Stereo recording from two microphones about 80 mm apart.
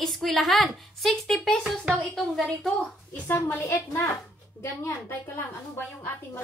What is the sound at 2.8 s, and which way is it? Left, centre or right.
A woman's voice, left.